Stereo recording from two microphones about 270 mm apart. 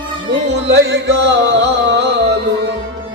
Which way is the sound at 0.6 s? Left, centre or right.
Right.